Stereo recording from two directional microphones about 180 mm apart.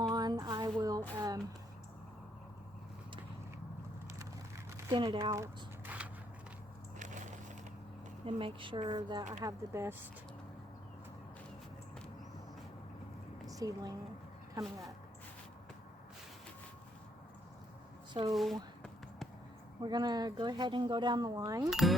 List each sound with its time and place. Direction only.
0.1 s a sound: 20° right (ahead or behind)
4.9 s speech: 30° right (ahead or behind)
5.3 s a sound: 15° right (ahead or behind)
8.3 s speech: 30° right (ahead or behind)
13.5 s speech: 20° right (ahead or behind)
14.6 s speech: centre (ahead or behind)
18.3 s a sound: centre (ahead or behind)
19.8 s speech: 25° right (ahead or behind)
21.7 s speech: centre (ahead or behind)